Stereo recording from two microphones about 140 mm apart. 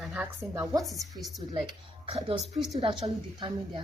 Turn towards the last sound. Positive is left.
turn(degrees=-35)  # may be behind; listen again after turning